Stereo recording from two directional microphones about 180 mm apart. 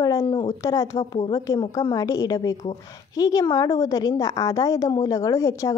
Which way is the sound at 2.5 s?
35° left (ahead or behind).